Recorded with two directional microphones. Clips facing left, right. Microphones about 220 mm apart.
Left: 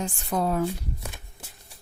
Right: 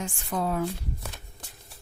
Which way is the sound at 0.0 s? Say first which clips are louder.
Left 3 dB; 40° left (ahead or behind).